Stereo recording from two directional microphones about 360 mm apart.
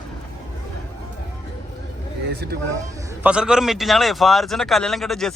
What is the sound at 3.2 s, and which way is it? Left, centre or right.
Speech, centre.